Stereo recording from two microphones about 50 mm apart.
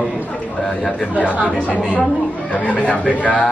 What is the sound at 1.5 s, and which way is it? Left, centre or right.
A man's voice, left.